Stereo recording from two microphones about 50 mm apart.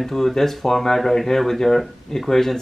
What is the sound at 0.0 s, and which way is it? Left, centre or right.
Speech, centre.